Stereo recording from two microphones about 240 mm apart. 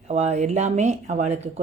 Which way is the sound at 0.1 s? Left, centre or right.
Right.